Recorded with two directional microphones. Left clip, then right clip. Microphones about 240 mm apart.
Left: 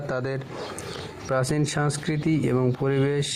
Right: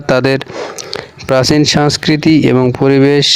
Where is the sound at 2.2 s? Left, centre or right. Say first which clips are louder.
Right 13 dB; right.